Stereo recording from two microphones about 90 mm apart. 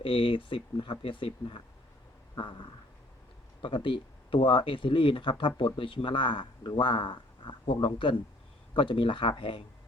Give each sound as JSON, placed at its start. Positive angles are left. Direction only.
{"t": 0.0, "sound": "speech", "side_deg": 75}
{"t": 3.8, "sound": "speech", "side_deg": 70}